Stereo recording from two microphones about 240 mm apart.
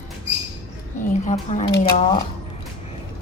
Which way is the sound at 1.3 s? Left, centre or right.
Left.